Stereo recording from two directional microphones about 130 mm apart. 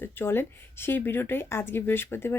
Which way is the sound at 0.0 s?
15° left (ahead or behind).